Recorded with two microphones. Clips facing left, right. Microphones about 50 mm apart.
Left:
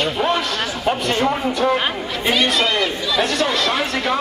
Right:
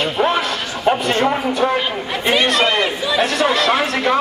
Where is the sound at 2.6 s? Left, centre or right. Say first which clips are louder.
Right 3 dB; centre.